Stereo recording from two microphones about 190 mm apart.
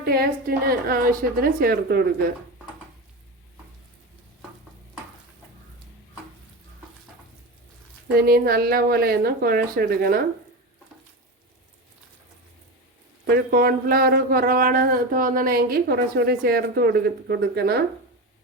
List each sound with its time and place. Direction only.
0.0 s a man's voice: 55° right (ahead or behind)
8.3 s a man's voice: 55° right (ahead or behind)
13.2 s a man's voice: 55° right (ahead or behind)